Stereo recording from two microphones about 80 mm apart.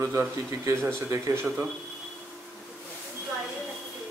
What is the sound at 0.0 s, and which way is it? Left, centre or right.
Speech, right.